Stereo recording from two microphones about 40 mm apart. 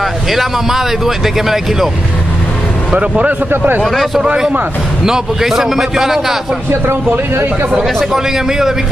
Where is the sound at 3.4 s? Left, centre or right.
Right.